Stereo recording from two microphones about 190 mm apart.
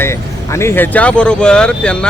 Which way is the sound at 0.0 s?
15° left (ahead or behind).